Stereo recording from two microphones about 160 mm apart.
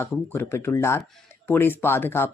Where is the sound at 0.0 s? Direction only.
15° left (ahead or behind).